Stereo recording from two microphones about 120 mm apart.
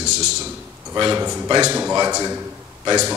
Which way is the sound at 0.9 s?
35° right (ahead or behind).